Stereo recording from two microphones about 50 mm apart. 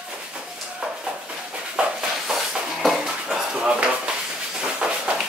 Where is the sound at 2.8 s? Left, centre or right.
Centre.